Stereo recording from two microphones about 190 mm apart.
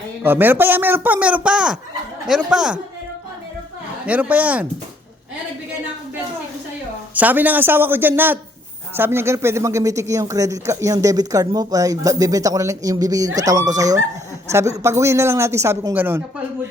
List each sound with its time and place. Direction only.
0.2 s speech: 10° right (ahead or behind)
4.0 s speech: 10° right (ahead or behind)
7.1 s speech: 10° right (ahead or behind)